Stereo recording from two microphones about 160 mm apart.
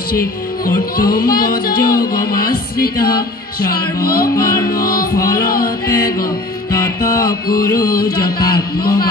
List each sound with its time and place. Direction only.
0.1 s music: 65° left (ahead or behind)